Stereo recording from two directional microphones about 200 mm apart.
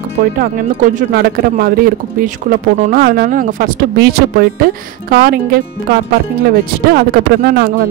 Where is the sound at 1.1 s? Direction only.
45° right (ahead or behind).